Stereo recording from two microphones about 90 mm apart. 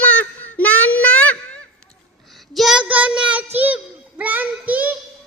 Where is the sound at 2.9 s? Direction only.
15° right (ahead or behind).